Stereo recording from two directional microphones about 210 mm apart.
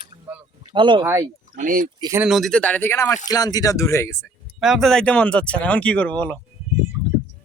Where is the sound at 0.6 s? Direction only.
20° right (ahead or behind).